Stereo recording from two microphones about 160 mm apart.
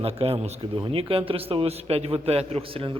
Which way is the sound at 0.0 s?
35° right (ahead or behind).